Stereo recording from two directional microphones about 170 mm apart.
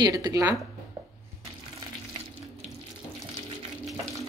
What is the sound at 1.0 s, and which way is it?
Dishes, 20° right (ahead or behind).